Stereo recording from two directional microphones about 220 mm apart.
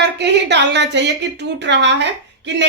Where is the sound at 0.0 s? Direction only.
50° right (ahead or behind).